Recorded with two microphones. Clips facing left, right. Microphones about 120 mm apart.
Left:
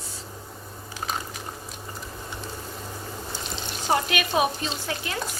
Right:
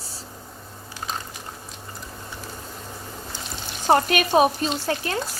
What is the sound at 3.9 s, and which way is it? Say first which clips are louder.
Speech: right 6 dB; 45° right (ahead or behind).